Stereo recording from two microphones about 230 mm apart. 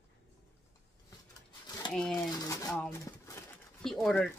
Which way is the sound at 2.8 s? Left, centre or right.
Centre.